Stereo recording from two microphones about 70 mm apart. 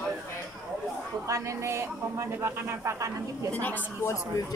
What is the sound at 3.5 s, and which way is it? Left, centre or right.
Speech, left.